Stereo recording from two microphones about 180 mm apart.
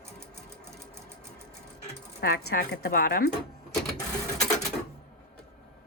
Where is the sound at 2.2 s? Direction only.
60° left (ahead or behind).